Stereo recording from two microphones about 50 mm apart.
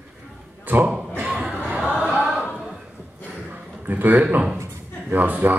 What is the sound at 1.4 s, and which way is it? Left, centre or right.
Choir, right.